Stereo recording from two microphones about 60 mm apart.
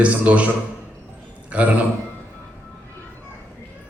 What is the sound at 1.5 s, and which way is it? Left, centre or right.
Speech, right.